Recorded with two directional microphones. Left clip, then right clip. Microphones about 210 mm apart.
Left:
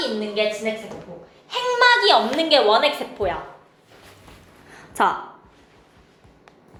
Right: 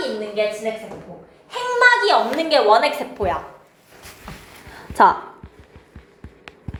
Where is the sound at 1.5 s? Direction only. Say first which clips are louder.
Right 1 dB; 20° left (ahead or behind).